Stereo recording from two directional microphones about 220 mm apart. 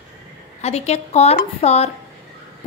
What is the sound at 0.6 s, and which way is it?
A woman's voice, 30° left (ahead or behind).